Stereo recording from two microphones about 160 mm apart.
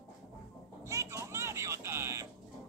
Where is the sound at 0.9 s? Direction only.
20° right (ahead or behind).